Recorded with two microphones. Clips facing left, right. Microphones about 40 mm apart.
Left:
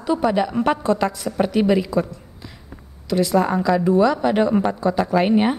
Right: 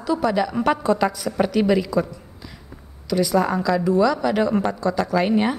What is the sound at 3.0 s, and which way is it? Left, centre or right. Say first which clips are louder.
Speech: left 1 dB; centre.